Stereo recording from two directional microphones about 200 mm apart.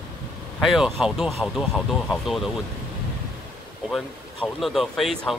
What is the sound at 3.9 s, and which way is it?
Speech, centre (ahead or behind).